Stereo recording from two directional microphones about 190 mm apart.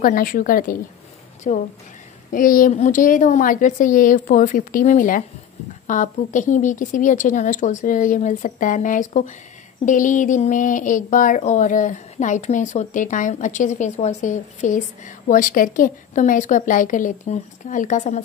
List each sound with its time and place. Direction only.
0.0 s a woman's voice: 45° left (ahead or behind)